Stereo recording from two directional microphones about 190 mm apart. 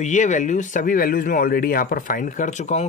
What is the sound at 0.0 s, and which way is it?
Speech, 40° left (ahead or behind).